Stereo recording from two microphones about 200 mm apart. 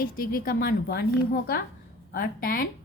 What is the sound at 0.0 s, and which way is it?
A woman's voice, 45° left (ahead or behind).